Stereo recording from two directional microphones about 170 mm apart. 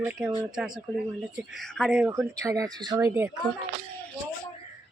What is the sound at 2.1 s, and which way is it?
Speech, 20° right (ahead or behind).